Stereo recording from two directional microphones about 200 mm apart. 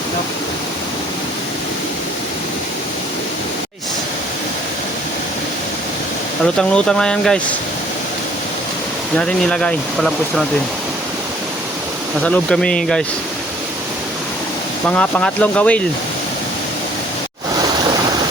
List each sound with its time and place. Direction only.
6.4 s speech: 5° left (ahead or behind)
9.1 s speech: 5° left (ahead or behind)
12.2 s speech: 5° left (ahead or behind)
14.8 s speech: 5° left (ahead or behind)